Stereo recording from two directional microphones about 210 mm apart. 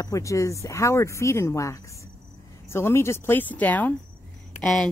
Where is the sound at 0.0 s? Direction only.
15° left (ahead or behind).